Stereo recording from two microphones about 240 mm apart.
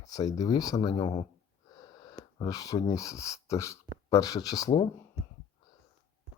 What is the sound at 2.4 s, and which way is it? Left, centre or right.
Speech, centre.